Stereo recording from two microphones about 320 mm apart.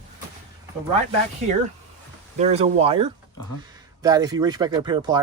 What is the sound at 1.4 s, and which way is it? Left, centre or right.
Speech, right.